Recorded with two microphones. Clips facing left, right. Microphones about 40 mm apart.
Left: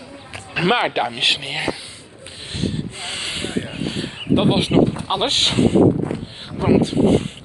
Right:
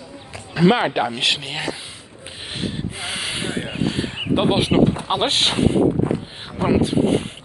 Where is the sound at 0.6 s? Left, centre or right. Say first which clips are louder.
Right 1 dB; left.